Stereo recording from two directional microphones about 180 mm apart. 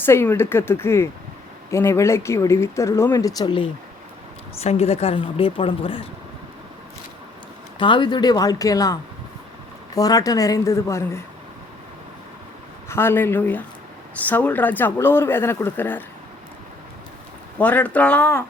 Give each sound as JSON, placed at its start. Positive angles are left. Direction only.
{"t": 0.0, "sound": "speech", "side_deg": 15}
{"t": 4.6, "sound": "a woman's voice", "side_deg": 35}
{"t": 7.8, "sound": "a woman's voice", "side_deg": 25}
{"t": 12.9, "sound": "speech", "side_deg": 10}
{"t": 17.6, "sound": "speech", "side_deg": 10}